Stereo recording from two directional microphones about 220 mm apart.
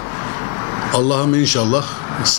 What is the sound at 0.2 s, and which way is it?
Vehicle, 20° left (ahead or behind).